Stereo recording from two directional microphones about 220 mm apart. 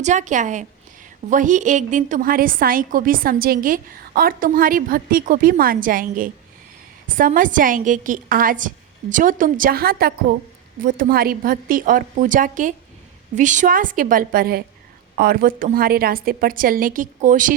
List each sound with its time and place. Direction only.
0.0 s a woman's voice: 35° right (ahead or behind)